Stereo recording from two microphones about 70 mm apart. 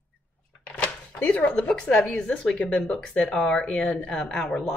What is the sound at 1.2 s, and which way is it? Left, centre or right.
Speech, centre.